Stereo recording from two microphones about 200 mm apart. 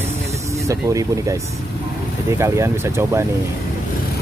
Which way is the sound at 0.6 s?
15° right (ahead or behind).